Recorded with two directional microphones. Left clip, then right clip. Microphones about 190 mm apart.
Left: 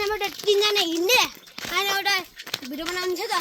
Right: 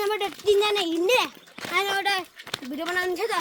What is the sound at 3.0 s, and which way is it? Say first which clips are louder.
Speech: even; 50° right (ahead or behind).